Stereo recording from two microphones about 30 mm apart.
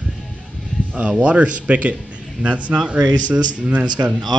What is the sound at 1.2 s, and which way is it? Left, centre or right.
A man's voice, right.